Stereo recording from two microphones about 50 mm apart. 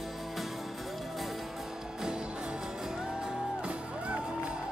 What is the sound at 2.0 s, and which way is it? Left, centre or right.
Music, centre.